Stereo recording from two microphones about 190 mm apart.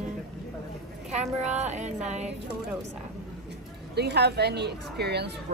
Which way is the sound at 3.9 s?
60° right (ahead or behind).